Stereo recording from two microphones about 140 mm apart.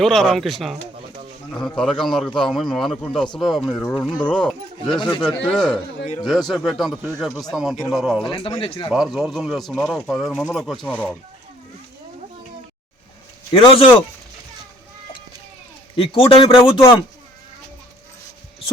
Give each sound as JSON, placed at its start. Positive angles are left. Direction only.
{"t": 0.0, "sound": "speech", "side_deg": 0}
{"t": 4.9, "sound": "speech", "side_deg": 35}
{"t": 5.5, "sound": "speech", "side_deg": 5}
{"t": 8.3, "sound": "speech", "side_deg": 35}
{"t": 8.9, "sound": "speech", "side_deg": -5}
{"t": 13.5, "sound": "speech", "side_deg": 40}
{"t": 16.0, "sound": "speech", "side_deg": 40}